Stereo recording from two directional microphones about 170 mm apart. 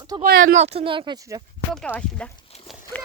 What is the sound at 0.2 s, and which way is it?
Speech, 55° right (ahead or behind).